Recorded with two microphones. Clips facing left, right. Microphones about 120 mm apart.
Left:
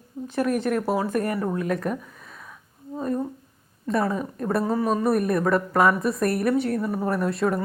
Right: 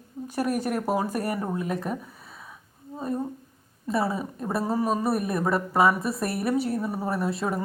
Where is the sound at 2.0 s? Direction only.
35° right (ahead or behind).